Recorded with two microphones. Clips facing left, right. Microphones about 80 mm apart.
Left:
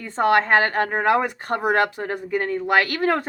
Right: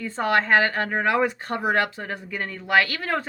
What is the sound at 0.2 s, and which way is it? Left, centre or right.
A woman's voice, left.